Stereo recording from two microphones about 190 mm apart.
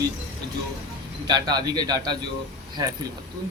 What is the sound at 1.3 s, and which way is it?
Speech, 20° right (ahead or behind).